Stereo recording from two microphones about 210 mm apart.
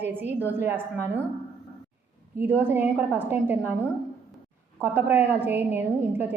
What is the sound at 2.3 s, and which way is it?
A woman's voice, 10° right (ahead or behind).